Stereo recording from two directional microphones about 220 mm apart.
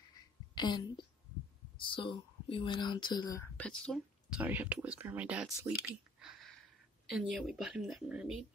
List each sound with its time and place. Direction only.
0.6 s a woman's voice: 20° left (ahead or behind); by 5.7 s 5° right (ahead or behind)
6.1 s a sound: centre (ahead or behind)
7.1 s speech: centre (ahead or behind)